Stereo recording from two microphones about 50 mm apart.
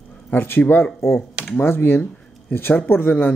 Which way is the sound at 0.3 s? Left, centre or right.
Left.